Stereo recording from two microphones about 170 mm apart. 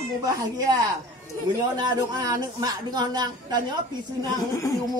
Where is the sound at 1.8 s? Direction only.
25° right (ahead or behind).